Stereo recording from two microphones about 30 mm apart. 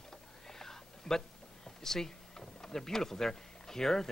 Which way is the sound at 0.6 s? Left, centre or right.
Centre.